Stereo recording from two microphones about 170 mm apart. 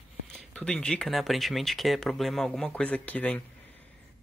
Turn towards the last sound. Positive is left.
turn(degrees=10)  # may be behind; listen again after turning